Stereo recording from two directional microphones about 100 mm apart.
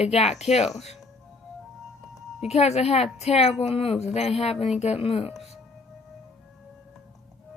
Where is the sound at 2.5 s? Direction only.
90° left.